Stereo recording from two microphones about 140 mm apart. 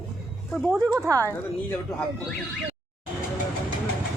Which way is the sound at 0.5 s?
5° left (ahead or behind).